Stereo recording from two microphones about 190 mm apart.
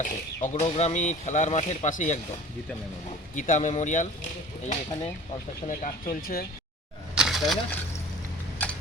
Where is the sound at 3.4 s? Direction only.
40° left (ahead or behind).